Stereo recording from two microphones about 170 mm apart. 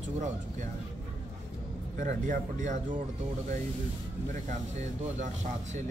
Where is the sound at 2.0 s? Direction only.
50° right (ahead or behind).